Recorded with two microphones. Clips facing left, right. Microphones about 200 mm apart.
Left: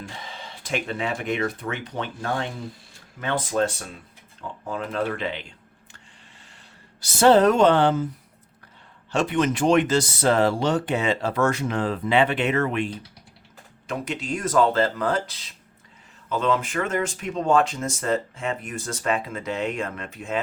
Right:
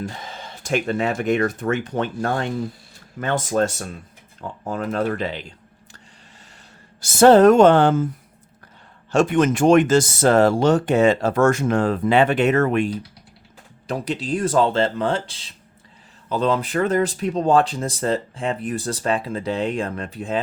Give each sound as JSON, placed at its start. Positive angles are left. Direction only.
{"t": 0.0, "sound": "speech", "side_deg": -40}
{"t": 7.0, "sound": "speech", "side_deg": -45}
{"t": 9.1, "sound": "speech", "side_deg": -45}
{"t": 13.8, "sound": "speech", "side_deg": -35}